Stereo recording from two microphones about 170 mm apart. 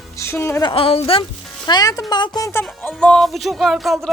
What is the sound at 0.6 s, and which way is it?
Speech, 35° left (ahead or behind).